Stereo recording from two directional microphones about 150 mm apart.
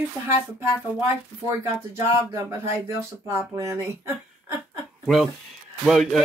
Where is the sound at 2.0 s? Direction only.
15° right (ahead or behind).